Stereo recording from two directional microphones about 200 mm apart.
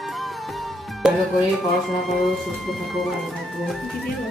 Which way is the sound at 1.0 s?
Centre (ahead or behind).